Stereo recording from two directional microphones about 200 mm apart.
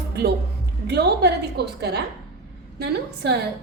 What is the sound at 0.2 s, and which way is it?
A woman's voice, 55° right (ahead or behind).